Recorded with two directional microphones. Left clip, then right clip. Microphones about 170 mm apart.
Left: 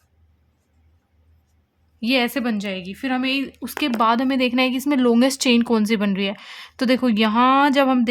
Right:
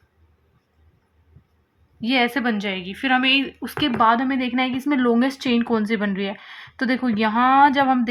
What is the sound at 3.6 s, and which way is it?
Speech, 40° left (ahead or behind).